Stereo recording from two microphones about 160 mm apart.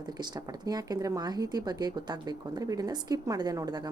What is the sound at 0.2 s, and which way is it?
Speech, 25° right (ahead or behind).